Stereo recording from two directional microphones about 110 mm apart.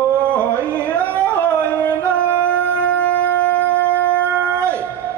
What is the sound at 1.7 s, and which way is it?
Music, 15° left (ahead or behind).